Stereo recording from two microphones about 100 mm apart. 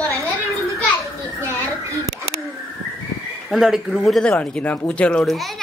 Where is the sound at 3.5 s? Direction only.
Centre (ahead or behind).